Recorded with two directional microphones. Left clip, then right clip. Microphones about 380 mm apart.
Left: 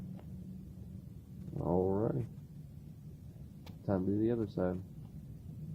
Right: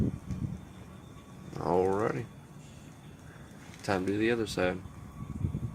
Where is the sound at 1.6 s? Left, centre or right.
Centre.